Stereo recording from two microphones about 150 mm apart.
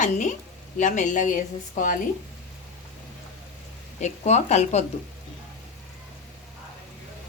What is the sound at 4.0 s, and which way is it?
Speech, 50° left (ahead or behind).